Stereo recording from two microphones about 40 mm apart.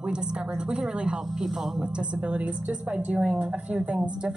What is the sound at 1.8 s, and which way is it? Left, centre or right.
A woman's voice, right.